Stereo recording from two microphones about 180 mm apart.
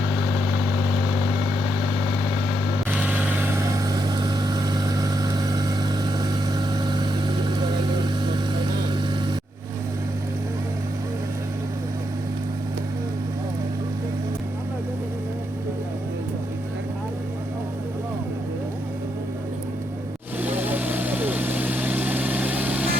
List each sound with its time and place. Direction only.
3.9 s vehicle: 25° right (ahead or behind)
20.4 s vehicle: 10° right (ahead or behind)